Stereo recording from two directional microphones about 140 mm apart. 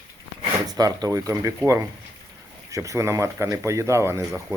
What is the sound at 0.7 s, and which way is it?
Speech, 25° right (ahead or behind).